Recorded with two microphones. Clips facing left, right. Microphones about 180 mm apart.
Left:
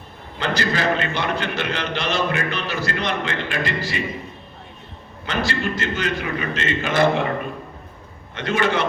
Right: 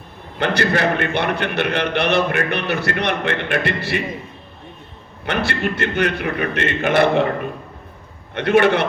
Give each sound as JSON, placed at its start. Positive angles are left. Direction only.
{"t": 0.3, "sound": "a man's voice", "side_deg": -60}
{"t": 5.2, "sound": "a man's voice", "side_deg": -60}
{"t": 8.4, "sound": "a man's voice", "side_deg": -60}